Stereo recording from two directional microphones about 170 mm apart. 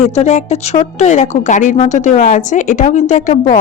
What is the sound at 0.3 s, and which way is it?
A woman's voice, 40° left (ahead or behind).